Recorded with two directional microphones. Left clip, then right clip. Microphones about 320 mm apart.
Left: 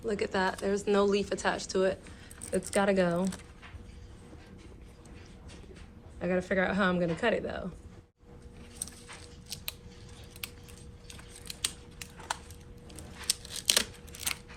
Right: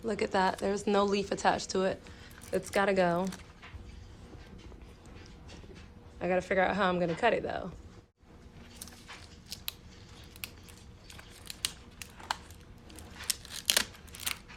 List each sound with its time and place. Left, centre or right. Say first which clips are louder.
0.1 s speech: right 1 dB; right
6.1 s speech: right 1 dB; right
9.5 s scissors: left 2 dB; centre
11.1 s a sound: left 1 dB; centre
12.9 s scissors: left 3 dB; centre